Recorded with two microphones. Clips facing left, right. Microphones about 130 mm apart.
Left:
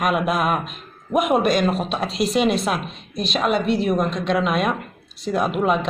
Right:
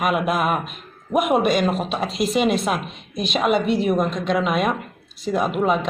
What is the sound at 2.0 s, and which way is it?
Speech, 50° right (ahead or behind).